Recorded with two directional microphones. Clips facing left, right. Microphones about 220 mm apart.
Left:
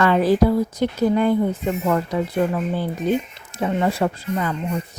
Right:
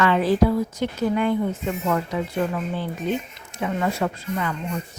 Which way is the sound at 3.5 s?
35° left (ahead or behind).